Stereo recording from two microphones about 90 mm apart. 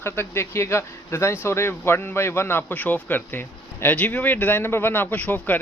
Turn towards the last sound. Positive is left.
turn(degrees=15)  # may be behind; listen again after turning